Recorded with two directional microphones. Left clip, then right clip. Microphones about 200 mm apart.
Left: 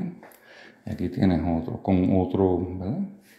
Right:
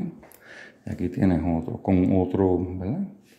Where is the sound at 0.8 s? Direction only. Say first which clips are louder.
Even; 15° right (ahead or behind).